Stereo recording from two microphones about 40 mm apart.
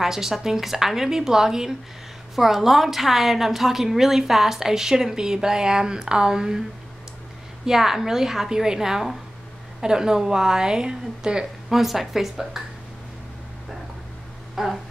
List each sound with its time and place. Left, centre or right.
0.0 s a woman's voice: centre
7.6 s a woman's voice: centre
11.7 s a woman's voice: centre
14.5 s a sound: centre